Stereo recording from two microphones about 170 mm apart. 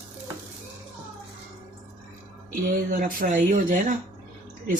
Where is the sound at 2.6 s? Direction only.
55° right (ahead or behind).